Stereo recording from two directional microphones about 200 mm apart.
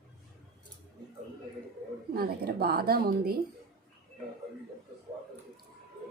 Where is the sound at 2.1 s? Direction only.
50° right (ahead or behind).